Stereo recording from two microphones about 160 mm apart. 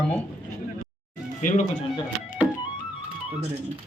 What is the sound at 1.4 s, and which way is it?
Speech, 50° left (ahead or behind).